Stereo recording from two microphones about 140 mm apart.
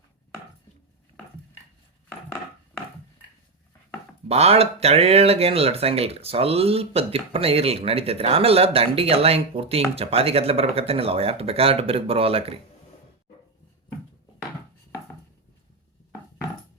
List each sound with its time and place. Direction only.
4.3 s speech: 45° right (ahead or behind)